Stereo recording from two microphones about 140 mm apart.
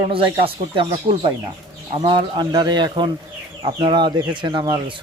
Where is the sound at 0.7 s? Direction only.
40° right (ahead or behind).